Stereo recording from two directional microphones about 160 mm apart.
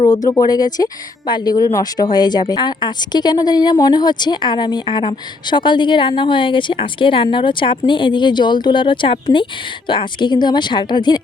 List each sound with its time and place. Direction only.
0.3 s speech: 25° left (ahead or behind)